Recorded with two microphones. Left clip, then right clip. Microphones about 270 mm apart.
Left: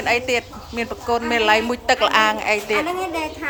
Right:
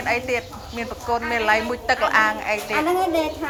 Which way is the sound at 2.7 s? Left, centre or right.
Centre.